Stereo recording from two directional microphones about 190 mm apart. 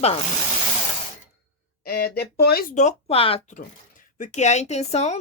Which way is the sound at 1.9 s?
55° left (ahead or behind).